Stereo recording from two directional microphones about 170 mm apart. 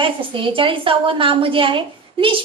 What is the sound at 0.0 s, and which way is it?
A woman's voice, 30° right (ahead or behind).